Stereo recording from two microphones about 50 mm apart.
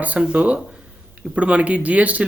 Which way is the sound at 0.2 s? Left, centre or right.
Right.